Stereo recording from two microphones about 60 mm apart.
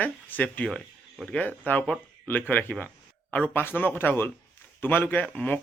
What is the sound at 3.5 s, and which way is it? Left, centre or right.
Speech, left.